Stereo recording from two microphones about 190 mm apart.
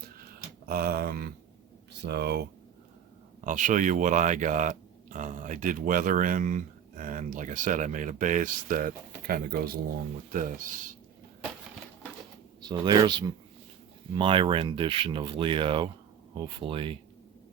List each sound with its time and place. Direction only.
0.7 s speech: 55° right (ahead or behind)
3.4 s speech: 45° right (ahead or behind)
12.6 s speech: 20° right (ahead or behind)